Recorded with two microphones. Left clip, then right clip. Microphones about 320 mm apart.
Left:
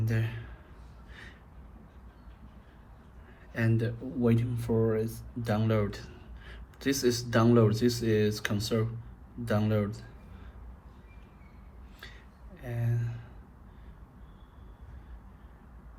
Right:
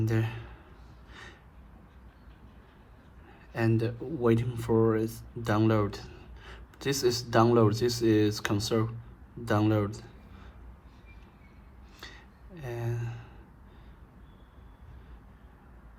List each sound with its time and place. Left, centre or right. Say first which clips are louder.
0.0 s a man's voice: right 4 dB; centre
3.5 s speech: right 3 dB; centre
11.9 s a sound: right 2 dB; centre